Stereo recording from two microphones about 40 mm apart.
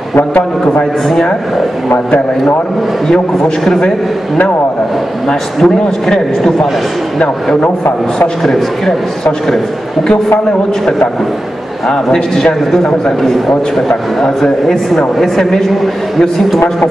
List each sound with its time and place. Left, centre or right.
3.1 s a man's voice: centre
5.6 s a man's voice: centre
8.5 s a man's voice: centre
11.9 s a man's voice: centre